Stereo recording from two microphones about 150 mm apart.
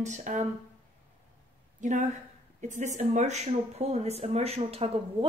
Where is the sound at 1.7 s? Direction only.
55° right (ahead or behind).